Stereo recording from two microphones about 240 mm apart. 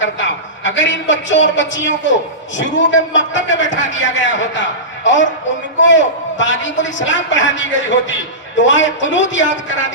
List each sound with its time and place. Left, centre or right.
0.0 s a man's voice: left